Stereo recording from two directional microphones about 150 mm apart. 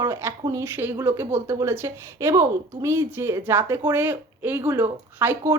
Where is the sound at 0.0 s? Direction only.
15° right (ahead or behind).